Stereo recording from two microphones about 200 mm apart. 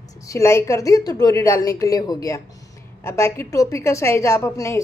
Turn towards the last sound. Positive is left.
turn(degrees=15)  # may be behind; listen again after turning